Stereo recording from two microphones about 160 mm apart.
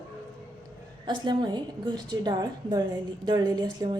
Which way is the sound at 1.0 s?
30° right (ahead or behind).